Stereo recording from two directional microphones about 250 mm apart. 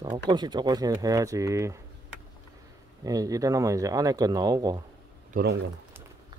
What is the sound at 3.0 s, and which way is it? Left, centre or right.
Speech, centre.